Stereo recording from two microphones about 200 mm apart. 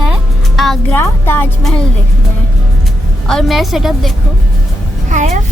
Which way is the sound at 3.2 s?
Centre (ahead or behind).